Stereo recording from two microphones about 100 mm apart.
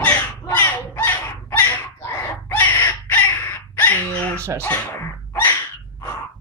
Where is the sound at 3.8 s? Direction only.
15° left (ahead or behind).